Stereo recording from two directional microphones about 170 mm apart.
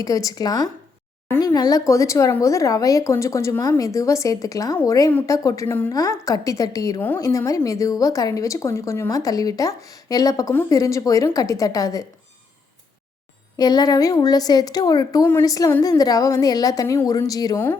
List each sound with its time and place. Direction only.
0.0 s a woman's voice: 20° left (ahead or behind)
1.3 s speech: 10° left (ahead or behind)
1.5 s a woman's voice: 20° left (ahead or behind)
13.6 s a woman's voice: 25° left (ahead or behind)